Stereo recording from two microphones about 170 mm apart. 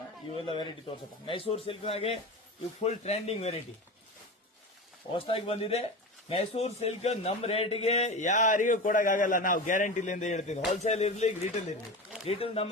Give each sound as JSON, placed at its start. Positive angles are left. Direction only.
{"t": 0.3, "sound": "speech", "side_deg": 30}
{"t": 5.1, "sound": "a man's voice", "side_deg": 35}